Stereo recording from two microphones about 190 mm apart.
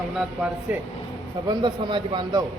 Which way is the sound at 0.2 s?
5° right (ahead or behind).